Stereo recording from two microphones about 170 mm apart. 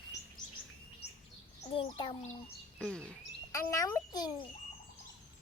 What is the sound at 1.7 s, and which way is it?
Speech, 30° left (ahead or behind).